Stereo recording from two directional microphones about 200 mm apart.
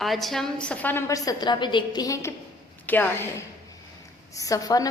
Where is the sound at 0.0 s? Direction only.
Centre (ahead or behind).